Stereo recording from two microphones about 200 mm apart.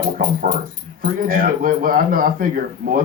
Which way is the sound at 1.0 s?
45° right (ahead or behind).